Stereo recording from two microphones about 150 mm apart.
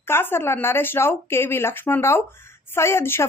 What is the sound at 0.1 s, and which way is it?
A woman's voice, 15° left (ahead or behind).